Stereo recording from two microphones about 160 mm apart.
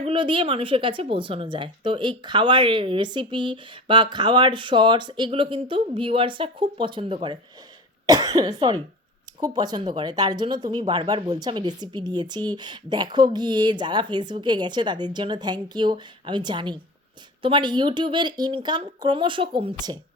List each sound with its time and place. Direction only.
0.0 s a woman's voice: 30° right (ahead or behind)